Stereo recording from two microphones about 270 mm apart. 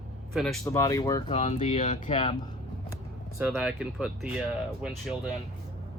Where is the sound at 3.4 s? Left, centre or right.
Centre.